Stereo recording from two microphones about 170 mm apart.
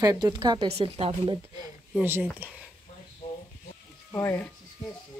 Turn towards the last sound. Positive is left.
turn(degrees=15)  # may be behind; listen again after turning